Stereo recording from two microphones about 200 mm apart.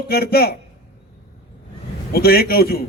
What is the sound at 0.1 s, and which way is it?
Speech, 50° left (ahead or behind).